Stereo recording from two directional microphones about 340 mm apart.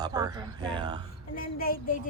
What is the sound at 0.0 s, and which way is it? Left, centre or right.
Speech, centre.